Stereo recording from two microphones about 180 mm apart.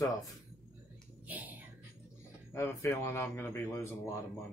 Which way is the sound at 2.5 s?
15° left (ahead or behind).